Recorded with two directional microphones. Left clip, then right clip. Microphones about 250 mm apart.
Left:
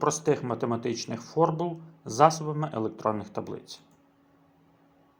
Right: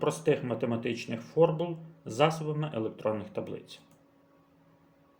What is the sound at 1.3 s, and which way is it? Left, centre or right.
Speech, left.